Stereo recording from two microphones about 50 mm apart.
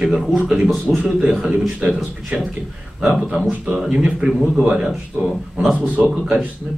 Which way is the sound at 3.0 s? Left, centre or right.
Centre.